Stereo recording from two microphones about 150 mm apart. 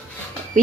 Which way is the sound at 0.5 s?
60° right (ahead or behind).